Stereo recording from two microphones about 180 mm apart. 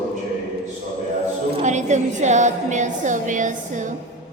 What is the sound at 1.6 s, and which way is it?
A woman's voice, 40° right (ahead or behind).